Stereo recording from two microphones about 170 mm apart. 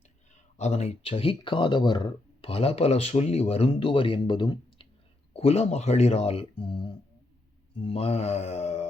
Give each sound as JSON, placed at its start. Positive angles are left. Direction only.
{"t": 0.5, "sound": "speech", "side_deg": 40}